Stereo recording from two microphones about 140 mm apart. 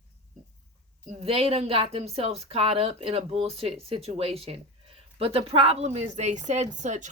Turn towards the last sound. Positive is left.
turn(degrees=-60)  # may be behind; listen again after turning